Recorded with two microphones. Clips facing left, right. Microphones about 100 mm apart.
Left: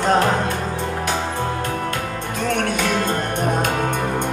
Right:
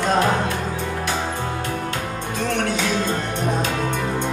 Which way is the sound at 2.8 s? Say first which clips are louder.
Left 2 dB; 50° left (ahead or behind).